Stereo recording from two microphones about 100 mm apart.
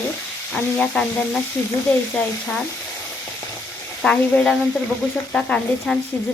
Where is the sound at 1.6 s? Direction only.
25° left (ahead or behind).